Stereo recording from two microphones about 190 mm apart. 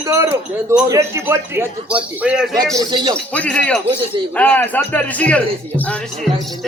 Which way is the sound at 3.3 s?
5° left (ahead or behind).